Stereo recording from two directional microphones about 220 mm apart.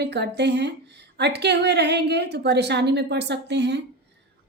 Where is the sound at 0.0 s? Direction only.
50° right (ahead or behind).